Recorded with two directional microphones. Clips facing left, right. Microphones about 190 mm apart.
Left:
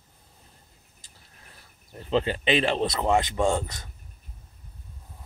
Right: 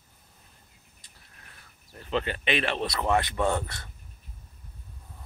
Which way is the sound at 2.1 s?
30° left (ahead or behind).